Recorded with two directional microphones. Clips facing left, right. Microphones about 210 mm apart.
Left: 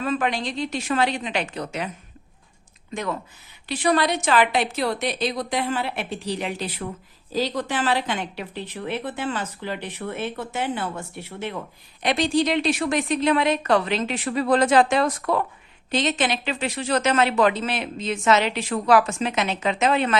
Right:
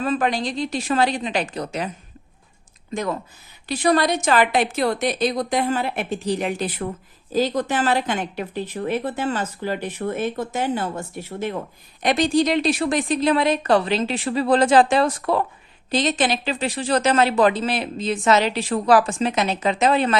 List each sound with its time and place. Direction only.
0.0 s a woman's voice: 35° right (ahead or behind)
2.9 s a woman's voice: 35° right (ahead or behind)